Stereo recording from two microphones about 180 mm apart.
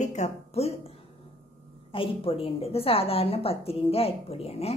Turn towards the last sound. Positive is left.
turn(degrees=35)  # may be behind; listen again after turning